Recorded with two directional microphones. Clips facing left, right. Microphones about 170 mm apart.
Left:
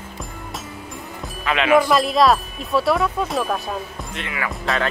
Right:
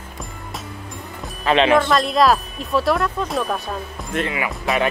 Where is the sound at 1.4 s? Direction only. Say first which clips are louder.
Right 1 dB; 30° right (ahead or behind).